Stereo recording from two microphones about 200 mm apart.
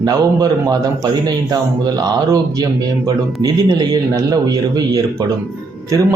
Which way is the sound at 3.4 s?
20° right (ahead or behind).